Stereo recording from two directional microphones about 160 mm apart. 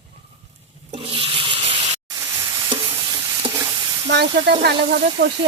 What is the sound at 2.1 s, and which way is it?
Stir, 25° right (ahead or behind).